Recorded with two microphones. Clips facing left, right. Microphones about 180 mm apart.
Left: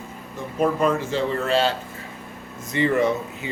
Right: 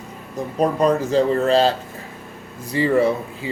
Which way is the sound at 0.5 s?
35° right (ahead or behind).